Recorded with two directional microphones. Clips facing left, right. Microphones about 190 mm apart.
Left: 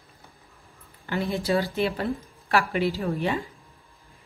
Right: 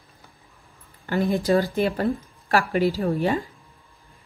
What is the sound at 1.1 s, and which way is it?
Speech, 40° right (ahead or behind).